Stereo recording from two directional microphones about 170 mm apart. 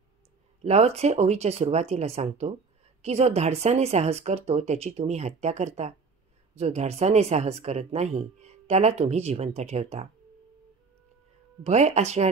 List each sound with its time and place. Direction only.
0.7 s speech: 40° right (ahead or behind)
11.6 s speech: 40° right (ahead or behind)